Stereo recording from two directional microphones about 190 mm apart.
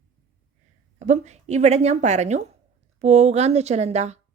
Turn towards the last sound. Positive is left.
turn(degrees=-35)  # may be behind; listen again after turning